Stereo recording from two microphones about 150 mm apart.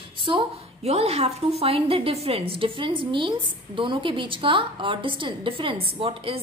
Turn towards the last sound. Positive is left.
turn(degrees=-35)  # may be behind; listen again after turning